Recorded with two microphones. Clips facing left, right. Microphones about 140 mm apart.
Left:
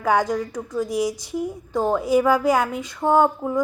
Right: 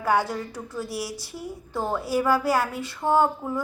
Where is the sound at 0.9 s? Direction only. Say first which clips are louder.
Left 12 dB; 15° left (ahead or behind).